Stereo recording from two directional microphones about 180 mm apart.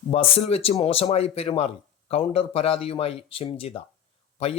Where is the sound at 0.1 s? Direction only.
35° left (ahead or behind).